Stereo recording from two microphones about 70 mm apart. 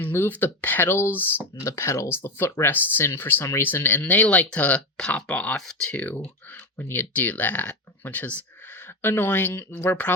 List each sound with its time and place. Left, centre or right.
0.0 s speech: left; by 6.0 s centre
6.0 s speech: left